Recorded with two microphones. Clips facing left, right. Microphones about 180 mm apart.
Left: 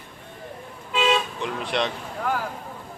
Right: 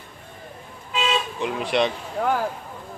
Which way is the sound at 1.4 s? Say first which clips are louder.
Right 4 dB; 5° right (ahead or behind).